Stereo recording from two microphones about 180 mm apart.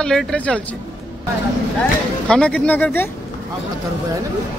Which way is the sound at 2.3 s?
5° left (ahead or behind).